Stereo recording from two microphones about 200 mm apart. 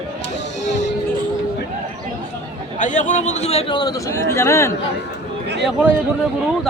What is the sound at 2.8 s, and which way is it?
A man's voice, 40° left (ahead or behind).